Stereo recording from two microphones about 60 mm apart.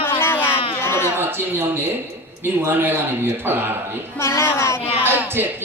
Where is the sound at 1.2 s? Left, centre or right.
Right.